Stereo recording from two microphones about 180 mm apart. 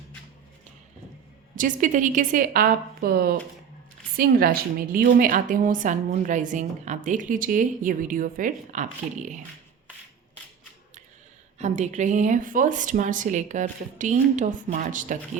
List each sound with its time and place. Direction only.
1.5 s a woman's voice: 45° right (ahead or behind)
11.6 s a woman's voice: 40° right (ahead or behind)